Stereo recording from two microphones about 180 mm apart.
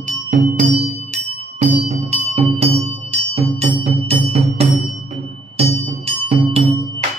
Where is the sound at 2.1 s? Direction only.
35° right (ahead or behind).